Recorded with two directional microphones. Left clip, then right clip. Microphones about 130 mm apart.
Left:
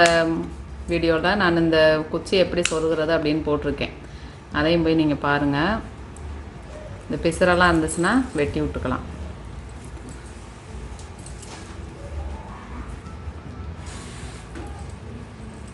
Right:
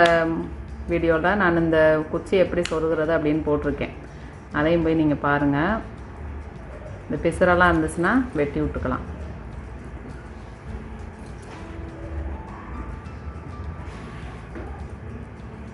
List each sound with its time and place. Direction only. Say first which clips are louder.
0.0 s a woman's voice: left 1 dB; 15° left (ahead or behind)
7.1 s a woman's voice: even; 15° left (ahead or behind)